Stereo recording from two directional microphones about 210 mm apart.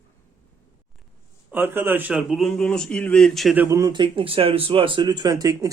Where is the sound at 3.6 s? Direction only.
15° right (ahead or behind).